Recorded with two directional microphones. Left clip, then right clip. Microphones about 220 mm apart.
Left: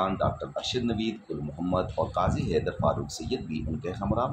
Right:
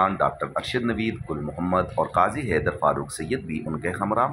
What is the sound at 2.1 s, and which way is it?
Speech, 25° right (ahead or behind).